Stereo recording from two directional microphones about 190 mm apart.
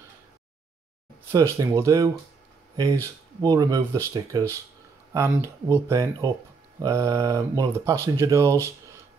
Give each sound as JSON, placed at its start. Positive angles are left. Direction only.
{"t": 1.3, "sound": "speech", "side_deg": -15}